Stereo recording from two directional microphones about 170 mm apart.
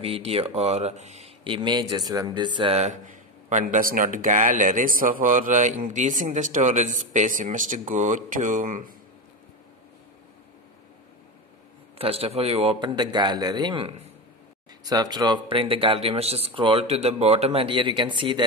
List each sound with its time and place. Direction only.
0.0 s speech: 35° right (ahead or behind); by 8.9 s 50° right (ahead or behind)
12.0 s speech: 35° right (ahead or behind)
14.9 s speech: 25° right (ahead or behind)